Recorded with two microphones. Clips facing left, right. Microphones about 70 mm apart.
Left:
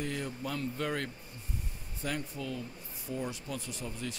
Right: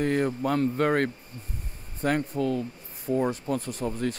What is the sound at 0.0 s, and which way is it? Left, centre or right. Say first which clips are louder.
Speech: right 11 dB; right.